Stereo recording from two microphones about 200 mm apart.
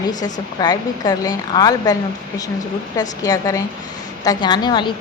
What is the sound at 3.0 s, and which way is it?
A woman's voice, 20° left (ahead or behind).